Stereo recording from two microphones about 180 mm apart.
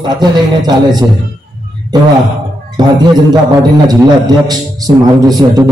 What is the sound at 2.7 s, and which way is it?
A man's voice, 20° right (ahead or behind).